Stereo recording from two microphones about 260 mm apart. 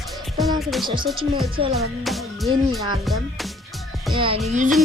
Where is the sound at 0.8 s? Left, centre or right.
Centre.